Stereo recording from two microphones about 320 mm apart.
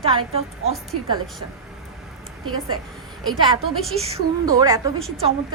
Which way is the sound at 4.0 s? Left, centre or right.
Centre.